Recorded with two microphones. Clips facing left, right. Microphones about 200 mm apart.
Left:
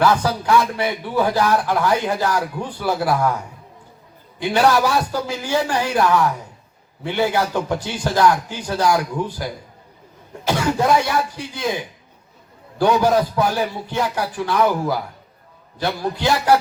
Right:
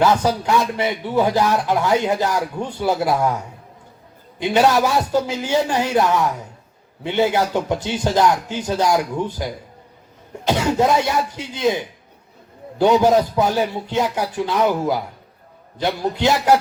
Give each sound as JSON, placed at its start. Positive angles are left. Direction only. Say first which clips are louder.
{"t": 0.0, "sound": "speech", "louder": "right 1 dB", "side_deg": -20}
{"t": 4.4, "sound": "speech", "louder": "right 1 dB", "side_deg": -20}
{"t": 10.4, "sound": "speech", "louder": "right 2 dB", "side_deg": -20}
{"t": 12.8, "sound": "speech", "louder": "right 2 dB", "side_deg": -20}